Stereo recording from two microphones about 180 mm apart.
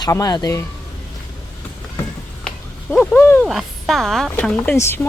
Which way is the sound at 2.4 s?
5° left (ahead or behind).